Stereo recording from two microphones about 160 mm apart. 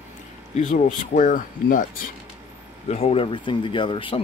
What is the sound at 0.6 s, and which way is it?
Speech, 50° left (ahead or behind).